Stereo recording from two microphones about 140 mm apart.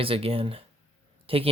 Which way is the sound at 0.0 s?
40° right (ahead or behind).